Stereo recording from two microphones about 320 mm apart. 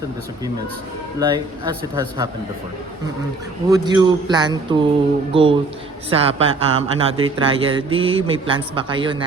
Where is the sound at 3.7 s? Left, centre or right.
Centre.